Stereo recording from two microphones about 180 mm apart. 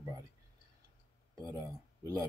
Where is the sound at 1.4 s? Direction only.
20° right (ahead or behind).